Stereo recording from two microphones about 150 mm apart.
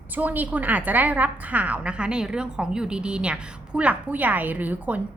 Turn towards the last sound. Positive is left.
turn(degrees=-10)  # may be behind; listen again after turning